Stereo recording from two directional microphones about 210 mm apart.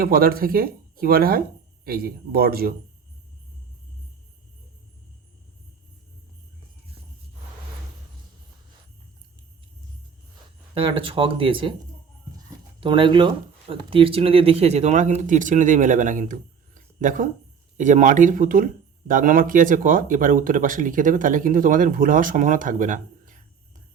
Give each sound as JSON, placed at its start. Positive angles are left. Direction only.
{"t": 0.0, "sound": "speech", "side_deg": -45}
{"t": 10.8, "sound": "speech", "side_deg": -25}
{"t": 12.8, "sound": "speech", "side_deg": -25}